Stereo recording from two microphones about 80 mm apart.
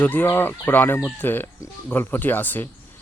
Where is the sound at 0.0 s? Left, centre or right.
Left.